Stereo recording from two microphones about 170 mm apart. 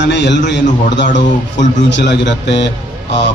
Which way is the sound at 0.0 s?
90° left.